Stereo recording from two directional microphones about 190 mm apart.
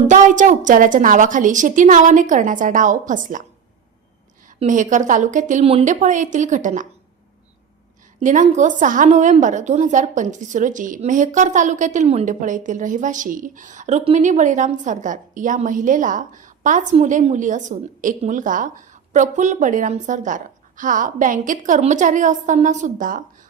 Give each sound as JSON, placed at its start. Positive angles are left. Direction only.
{"t": 0.1, "sound": "a woman's voice", "side_deg": -40}
{"t": 4.4, "sound": "a woman's voice", "side_deg": -40}
{"t": 8.2, "sound": "a woman's voice", "side_deg": -40}